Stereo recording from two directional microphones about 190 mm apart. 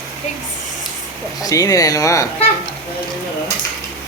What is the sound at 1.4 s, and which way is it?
Speech, 20° left (ahead or behind).